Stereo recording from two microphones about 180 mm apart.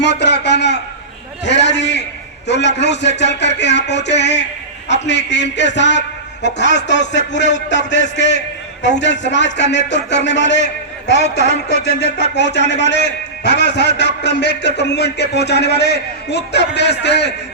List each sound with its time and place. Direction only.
0.0 s a sound: 70° left (ahead or behind)
2.5 s a man's voice: 75° left (ahead or behind)
12.3 s a man's voice: 70° left (ahead or behind)